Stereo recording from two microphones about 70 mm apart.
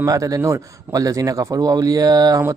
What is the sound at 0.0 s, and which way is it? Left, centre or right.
Speech, right.